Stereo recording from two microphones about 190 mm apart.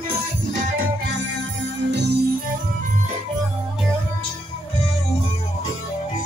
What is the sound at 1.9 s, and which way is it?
Music, 60° right (ahead or behind).